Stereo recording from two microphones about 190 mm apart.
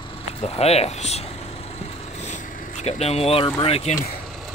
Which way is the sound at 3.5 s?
30° left (ahead or behind).